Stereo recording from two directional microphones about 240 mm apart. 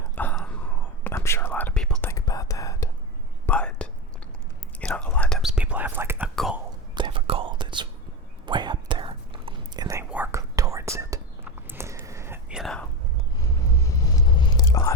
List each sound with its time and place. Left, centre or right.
0.2 s a sound: centre
1.0 s whispering: centre
6.9 s whispering: centre
13.4 s biting: centre